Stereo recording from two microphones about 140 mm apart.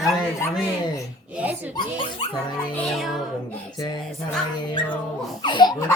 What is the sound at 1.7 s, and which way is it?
Speech, 35° left (ahead or behind).